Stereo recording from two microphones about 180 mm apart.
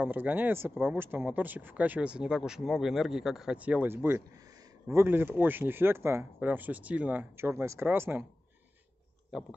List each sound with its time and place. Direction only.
0.0 s speech: 10° right (ahead or behind)